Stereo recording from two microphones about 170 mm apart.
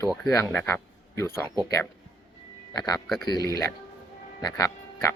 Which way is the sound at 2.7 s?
20° left (ahead or behind).